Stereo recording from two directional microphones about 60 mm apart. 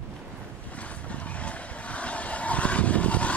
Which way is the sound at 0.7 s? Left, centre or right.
Left.